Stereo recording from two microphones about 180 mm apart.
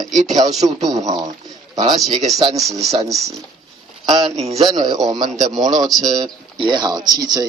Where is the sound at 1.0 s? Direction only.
20° right (ahead or behind).